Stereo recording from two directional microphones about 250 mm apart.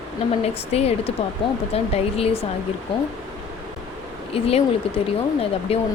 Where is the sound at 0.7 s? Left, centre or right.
Left.